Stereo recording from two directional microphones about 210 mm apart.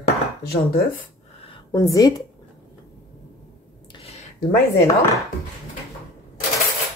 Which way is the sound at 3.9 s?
25° left (ahead or behind).